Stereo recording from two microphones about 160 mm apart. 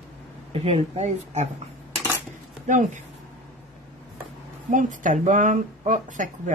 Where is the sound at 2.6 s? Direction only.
50° right (ahead or behind).